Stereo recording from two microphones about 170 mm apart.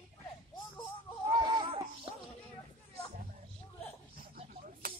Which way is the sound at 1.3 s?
25° right (ahead or behind).